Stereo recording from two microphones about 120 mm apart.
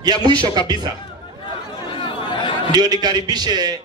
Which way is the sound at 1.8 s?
45° left (ahead or behind).